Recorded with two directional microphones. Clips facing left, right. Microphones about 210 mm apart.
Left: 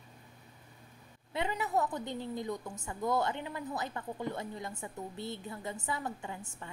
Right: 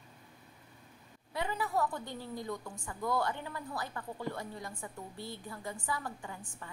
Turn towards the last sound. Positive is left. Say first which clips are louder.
# left 2 dB
turn(degrees=25)  # may be behind; listen again after turning